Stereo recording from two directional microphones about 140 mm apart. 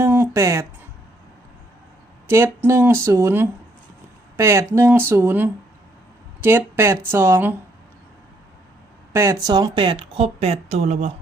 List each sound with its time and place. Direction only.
0.0 s speech: 15° right (ahead or behind)
2.2 s speech: 15° right (ahead or behind)
9.1 s speech: 20° right (ahead or behind); by 11.1 s 55° right (ahead or behind)